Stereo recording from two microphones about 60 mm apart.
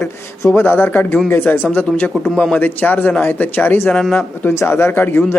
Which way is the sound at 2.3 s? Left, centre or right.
Centre.